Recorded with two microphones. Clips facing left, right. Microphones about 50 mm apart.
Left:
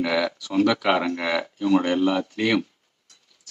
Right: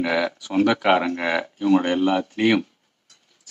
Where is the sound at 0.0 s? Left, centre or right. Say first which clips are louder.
Right 1 dB; right.